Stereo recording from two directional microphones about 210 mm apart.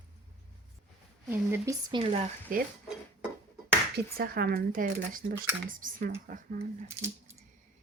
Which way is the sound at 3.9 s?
45° right (ahead or behind).